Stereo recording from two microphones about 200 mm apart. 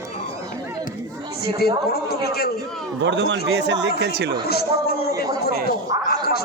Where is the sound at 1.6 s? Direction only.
50° left (ahead or behind).